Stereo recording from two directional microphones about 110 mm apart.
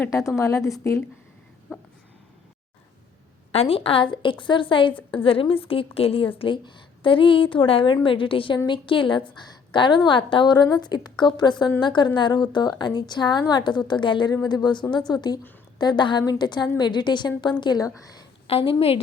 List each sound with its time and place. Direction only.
0.1 s a woman's voice: 25° left (ahead or behind)
3.5 s a woman's voice: 65° left (ahead or behind)
6.4 s a woman's voice: 45° left (ahead or behind)
18.4 s a woman's voice: 60° left (ahead or behind)